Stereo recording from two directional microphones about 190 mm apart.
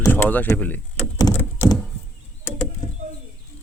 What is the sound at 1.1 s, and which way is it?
Thunk, 15° left (ahead or behind).